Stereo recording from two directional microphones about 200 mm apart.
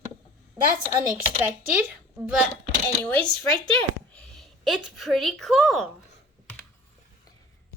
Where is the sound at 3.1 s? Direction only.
5° left (ahead or behind).